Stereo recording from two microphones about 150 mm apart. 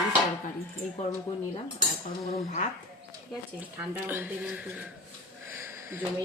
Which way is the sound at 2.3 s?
50° left (ahead or behind).